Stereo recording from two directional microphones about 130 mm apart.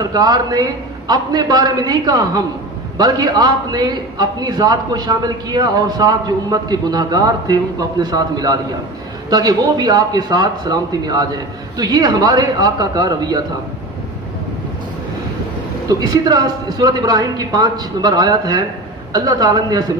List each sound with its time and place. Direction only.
0.0 s a man's voice: 30° right (ahead or behind)
15.9 s a man's voice: 30° right (ahead or behind)